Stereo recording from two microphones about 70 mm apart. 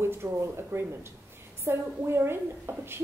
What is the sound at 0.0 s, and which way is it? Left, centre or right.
A woman's voice, right.